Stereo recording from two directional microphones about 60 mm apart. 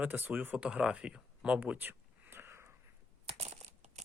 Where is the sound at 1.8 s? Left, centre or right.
Right.